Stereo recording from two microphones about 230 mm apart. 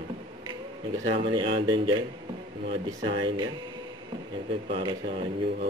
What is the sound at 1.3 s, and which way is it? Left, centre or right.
Speech, right.